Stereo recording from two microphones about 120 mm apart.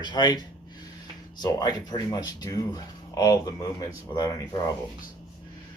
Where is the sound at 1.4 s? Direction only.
35° left (ahead or behind).